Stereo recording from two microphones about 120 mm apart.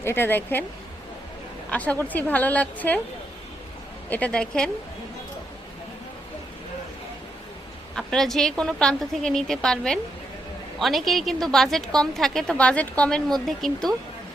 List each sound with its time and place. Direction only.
0.0 s a woman's voice: 20° left (ahead or behind)
1.7 s a woman's voice: 10° left (ahead or behind)
4.1 s a woman's voice: 10° left (ahead or behind)
7.9 s a woman's voice: 5° left (ahead or behind)